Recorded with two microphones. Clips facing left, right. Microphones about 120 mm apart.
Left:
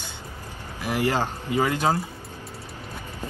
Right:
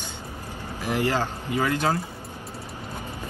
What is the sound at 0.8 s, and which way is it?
Speech, 15° left (ahead or behind).